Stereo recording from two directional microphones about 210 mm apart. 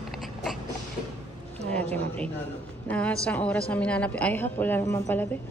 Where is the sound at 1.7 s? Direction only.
5° left (ahead or behind).